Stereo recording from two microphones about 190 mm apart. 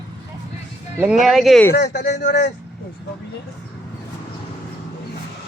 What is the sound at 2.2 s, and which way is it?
Speech, 40° left (ahead or behind).